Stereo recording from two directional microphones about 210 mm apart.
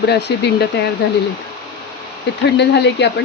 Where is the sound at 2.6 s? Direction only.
55° left (ahead or behind).